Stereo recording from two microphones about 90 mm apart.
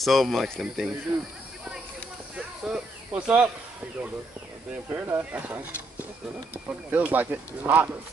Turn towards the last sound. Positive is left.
turn(degrees=-20)  # may be behind; listen again after turning